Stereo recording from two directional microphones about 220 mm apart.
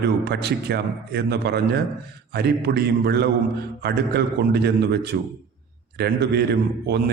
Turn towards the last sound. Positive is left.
turn(degrees=-50)  # may be behind; listen again after turning